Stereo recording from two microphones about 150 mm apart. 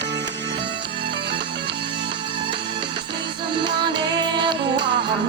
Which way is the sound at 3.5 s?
30° right (ahead or behind).